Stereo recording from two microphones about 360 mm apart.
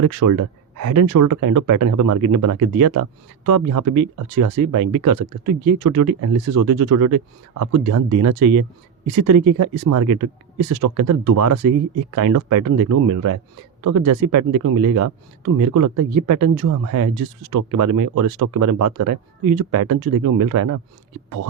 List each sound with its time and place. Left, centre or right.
0.0 s speech: right